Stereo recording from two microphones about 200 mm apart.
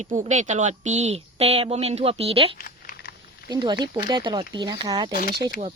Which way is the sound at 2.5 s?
45° left (ahead or behind).